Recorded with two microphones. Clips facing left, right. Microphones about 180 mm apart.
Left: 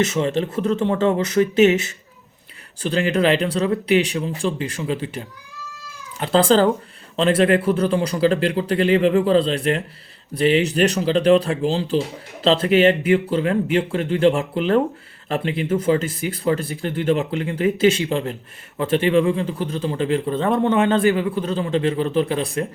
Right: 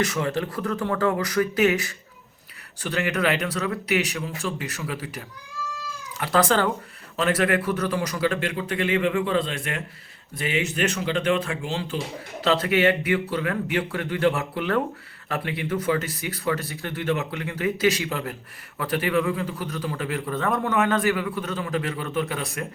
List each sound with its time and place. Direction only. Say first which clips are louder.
0.0 s a man's voice: left 5 dB; 25° left (ahead or behind)